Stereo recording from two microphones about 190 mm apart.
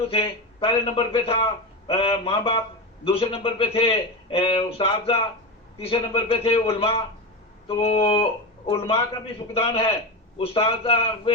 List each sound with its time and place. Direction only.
0.1 s a man's voice: 30° left (ahead or behind)